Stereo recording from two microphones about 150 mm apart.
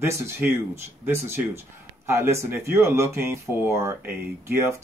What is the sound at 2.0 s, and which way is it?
Speech, 20° right (ahead or behind).